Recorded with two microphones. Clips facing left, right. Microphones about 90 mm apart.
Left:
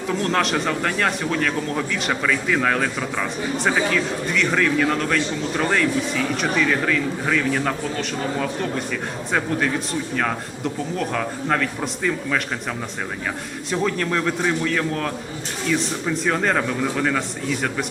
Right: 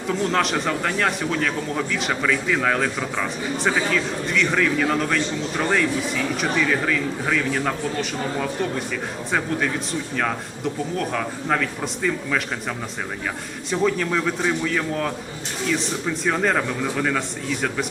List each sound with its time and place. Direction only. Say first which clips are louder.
0.1 s a man's voice: even; centre (ahead or behind)
10.2 s a man's voice: even; centre (ahead or behind)
13.7 s a man's voice: right 1 dB; centre (ahead or behind)